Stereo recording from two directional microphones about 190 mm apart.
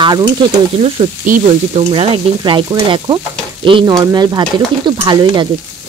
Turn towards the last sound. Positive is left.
turn(degrees=-25)  # may be behind; listen again after turning